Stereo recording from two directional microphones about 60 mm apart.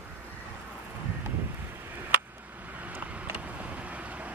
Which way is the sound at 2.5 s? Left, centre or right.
Right.